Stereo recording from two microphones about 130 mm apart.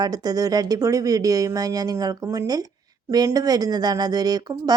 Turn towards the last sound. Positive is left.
turn(degrees=-30)  # may be behind; listen again after turning